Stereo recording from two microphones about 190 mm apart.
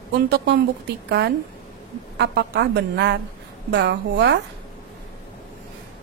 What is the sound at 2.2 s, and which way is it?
A woman's voice, 60° right (ahead or behind).